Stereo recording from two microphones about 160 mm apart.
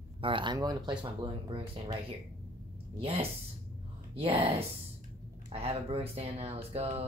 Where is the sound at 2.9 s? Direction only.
35° right (ahead or behind).